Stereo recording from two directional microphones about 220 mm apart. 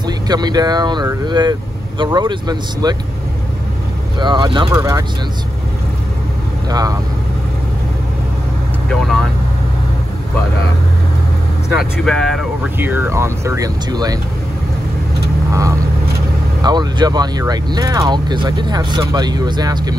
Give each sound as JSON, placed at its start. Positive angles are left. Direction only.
{"t": 0.0, "sound": "speech", "side_deg": -20}
{"t": 4.2, "sound": "speech", "side_deg": -20}
{"t": 6.7, "sound": "speech", "side_deg": -15}
{"t": 8.8, "sound": "speech", "side_deg": 0}
{"t": 11.8, "sound": "speech", "side_deg": 5}
{"t": 16.6, "sound": "speech", "side_deg": -20}